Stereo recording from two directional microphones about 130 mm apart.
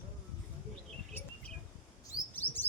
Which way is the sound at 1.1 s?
15° left (ahead or behind).